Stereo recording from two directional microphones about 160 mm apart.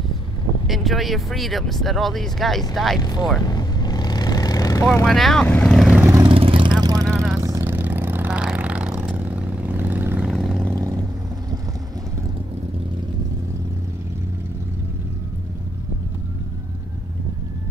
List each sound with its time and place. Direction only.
0.7 s speech: centre (ahead or behind)
3.0 s speech: 25° left (ahead or behind)
3.4 s vehicle: 25° left (ahead or behind)
5.0 s speech: centre (ahead or behind)
5.9 s vehicle: 15° right (ahead or behind)
6.2 s vehicle: 35° right (ahead or behind); by 10.7 s centre (ahead or behind)
10.7 s vehicle: 20° right (ahead or behind)